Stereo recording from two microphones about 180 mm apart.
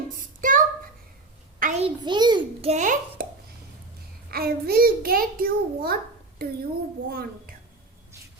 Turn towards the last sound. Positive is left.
turn(degrees=-55)  # may be behind; listen again after turning